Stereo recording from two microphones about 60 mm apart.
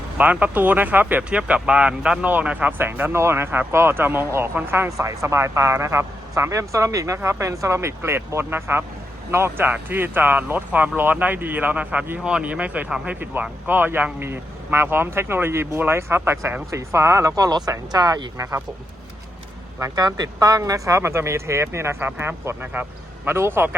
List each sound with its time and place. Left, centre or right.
0.2 s speech: right
1.3 s speech: centre
2.7 s speech: right
4.9 s speech: right
16.7 s speech: right
17.3 s speech: right
19.8 s a man's voice: right